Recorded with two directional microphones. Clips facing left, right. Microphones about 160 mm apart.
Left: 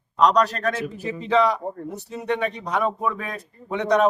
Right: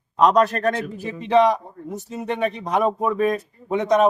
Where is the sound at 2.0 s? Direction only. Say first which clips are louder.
Right 2 dB; 45° right (ahead or behind).